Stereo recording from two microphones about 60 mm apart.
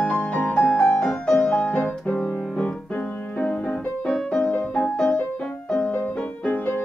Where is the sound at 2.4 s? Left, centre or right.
Centre.